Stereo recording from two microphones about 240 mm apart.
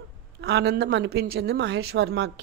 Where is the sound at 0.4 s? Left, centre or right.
Right.